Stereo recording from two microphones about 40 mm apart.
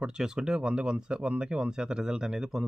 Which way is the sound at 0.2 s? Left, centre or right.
Centre.